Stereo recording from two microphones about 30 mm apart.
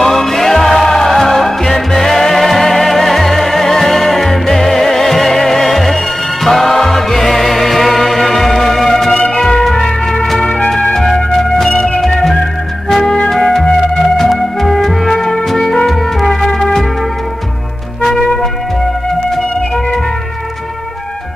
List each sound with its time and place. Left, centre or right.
0.0 s music: centre
10.9 s music: centre
11.7 s music: left
14.1 s music: centre